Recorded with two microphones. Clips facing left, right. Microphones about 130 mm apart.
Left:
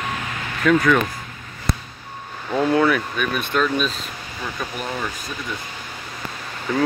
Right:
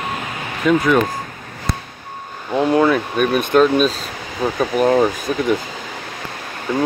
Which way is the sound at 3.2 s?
40° right (ahead or behind).